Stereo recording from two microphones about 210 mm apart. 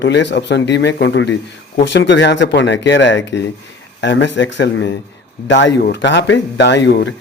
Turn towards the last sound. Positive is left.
turn(degrees=55)  # may be behind; listen again after turning